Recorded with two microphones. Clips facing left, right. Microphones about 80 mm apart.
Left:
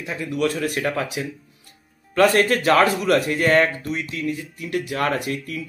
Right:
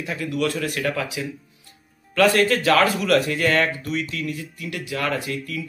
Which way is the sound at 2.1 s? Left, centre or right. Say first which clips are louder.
Left 1 dB; left.